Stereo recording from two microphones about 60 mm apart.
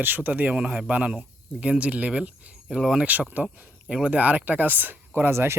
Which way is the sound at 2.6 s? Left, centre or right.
Centre.